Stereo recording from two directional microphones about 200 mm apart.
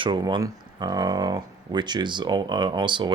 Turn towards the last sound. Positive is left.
turn(degrees=-25)  # may be behind; listen again after turning